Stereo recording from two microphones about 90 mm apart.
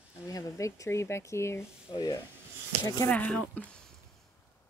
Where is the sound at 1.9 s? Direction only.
50° left (ahead or behind).